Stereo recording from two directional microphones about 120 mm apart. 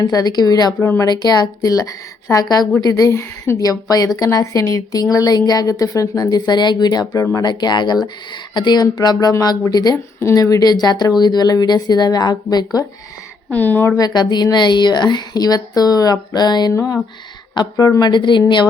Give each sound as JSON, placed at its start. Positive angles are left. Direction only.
{"t": 0.0, "sound": "a woman's voice", "side_deg": 35}
{"t": 13.5, "sound": "a woman's voice", "side_deg": 15}
{"t": 13.9, "sound": "a woman's voice", "side_deg": 35}
{"t": 18.1, "sound": "speech", "side_deg": 40}